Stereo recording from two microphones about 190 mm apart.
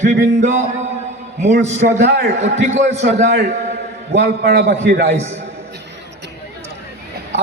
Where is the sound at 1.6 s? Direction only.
35° right (ahead or behind).